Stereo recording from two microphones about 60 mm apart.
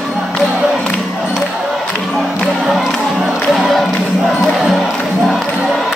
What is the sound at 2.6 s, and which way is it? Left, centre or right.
Music, centre.